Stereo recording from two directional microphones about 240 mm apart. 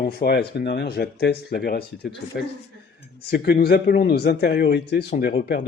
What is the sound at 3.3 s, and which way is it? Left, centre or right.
Speech, left.